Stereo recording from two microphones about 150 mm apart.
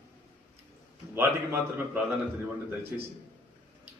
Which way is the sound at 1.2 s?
15° right (ahead or behind).